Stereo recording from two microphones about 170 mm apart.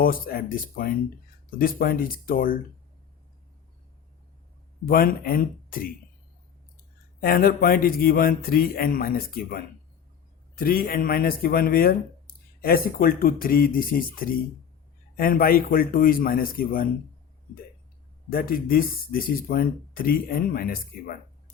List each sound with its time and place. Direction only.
0.0 s speech: 60° left (ahead or behind)
4.9 s speech: 60° left (ahead or behind)
7.2 s speech: 60° left (ahead or behind)
10.6 s speech: 60° left (ahead or behind)
18.3 s speech: 60° left (ahead or behind)